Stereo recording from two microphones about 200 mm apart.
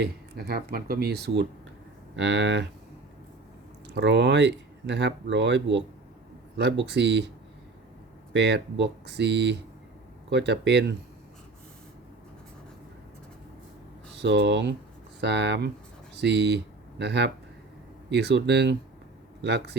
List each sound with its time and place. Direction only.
0.0 s speech: 50° right (ahead or behind)
3.9 s speech: 60° right (ahead or behind)
8.3 s speech: 60° right (ahead or behind)
14.2 s speech: 60° right (ahead or behind)